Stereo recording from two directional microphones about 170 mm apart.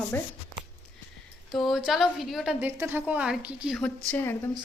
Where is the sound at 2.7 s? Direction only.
15° right (ahead or behind).